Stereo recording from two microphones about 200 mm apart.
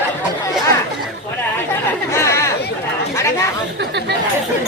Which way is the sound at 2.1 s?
15° left (ahead or behind).